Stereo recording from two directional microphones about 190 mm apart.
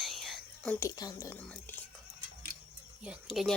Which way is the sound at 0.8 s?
20° left (ahead or behind).